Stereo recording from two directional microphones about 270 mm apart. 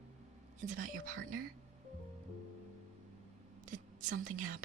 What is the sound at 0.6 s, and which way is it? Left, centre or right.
Speech, right.